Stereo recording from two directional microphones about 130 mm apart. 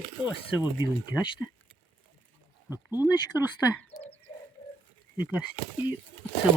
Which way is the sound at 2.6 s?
15° right (ahead or behind).